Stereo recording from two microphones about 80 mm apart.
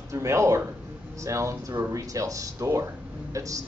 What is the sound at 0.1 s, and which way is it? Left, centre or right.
A man's voice, right.